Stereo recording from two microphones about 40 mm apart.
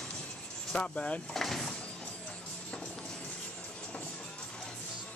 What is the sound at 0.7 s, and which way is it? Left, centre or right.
Speech, left.